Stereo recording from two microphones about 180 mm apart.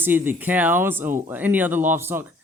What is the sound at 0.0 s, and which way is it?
Speech, 10° right (ahead or behind).